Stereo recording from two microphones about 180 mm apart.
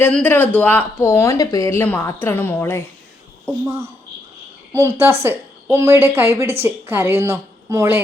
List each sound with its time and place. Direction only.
0.0 s speech: 10° left (ahead or behind)
4.7 s a woman's voice: 15° right (ahead or behind)